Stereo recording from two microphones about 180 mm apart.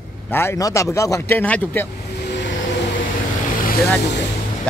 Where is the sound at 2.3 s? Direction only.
75° left (ahead or behind).